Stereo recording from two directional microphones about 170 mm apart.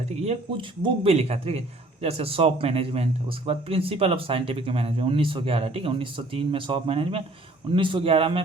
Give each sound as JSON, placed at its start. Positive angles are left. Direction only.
{"t": 0.3, "sound": "a man's voice", "side_deg": -35}